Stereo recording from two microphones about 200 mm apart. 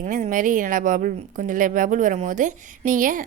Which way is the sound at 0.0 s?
40° right (ahead or behind).